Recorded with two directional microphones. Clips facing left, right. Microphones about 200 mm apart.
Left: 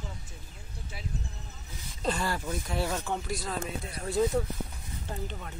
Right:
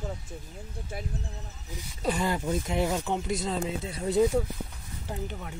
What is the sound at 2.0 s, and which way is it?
Speech, 15° right (ahead or behind).